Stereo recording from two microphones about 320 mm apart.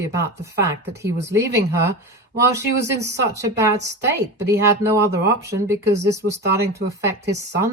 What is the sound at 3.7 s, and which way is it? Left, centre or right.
Speech, right.